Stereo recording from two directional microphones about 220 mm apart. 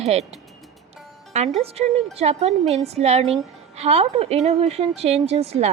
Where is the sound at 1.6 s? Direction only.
30° right (ahead or behind).